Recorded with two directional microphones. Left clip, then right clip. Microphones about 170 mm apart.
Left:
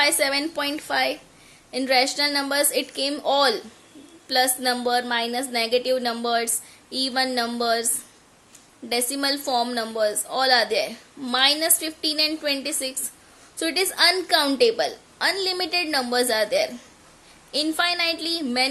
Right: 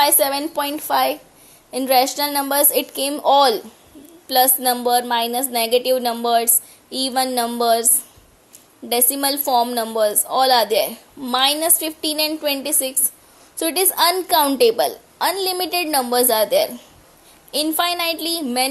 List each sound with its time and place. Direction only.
0.0 s a woman's voice: 10° right (ahead or behind)
8.9 s a woman's voice: 15° right (ahead or behind)